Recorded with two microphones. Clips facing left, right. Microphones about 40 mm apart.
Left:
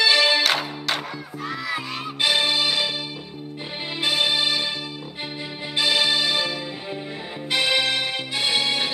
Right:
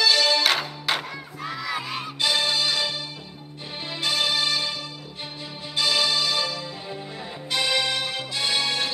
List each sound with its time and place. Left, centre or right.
0.0 s music: centre
0.4 s music: centre
2.1 s music: left
4.0 s music: left
5.8 s music: left